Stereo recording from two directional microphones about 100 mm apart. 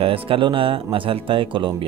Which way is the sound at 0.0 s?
65° right (ahead or behind).